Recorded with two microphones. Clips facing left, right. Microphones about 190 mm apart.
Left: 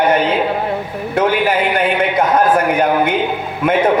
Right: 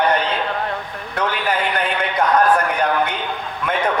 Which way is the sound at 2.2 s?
25° left (ahead or behind).